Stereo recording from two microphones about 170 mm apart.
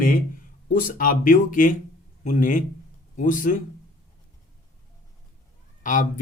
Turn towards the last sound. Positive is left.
turn(degrees=50)  # may be behind; listen again after turning